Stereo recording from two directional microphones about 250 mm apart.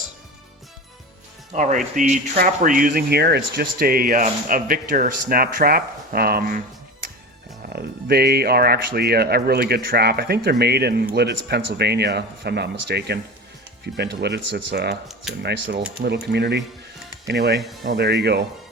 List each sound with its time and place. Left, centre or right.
1.5 s speech: right
7.7 s speech: right
15.0 s speech: centre
16.3 s speech: right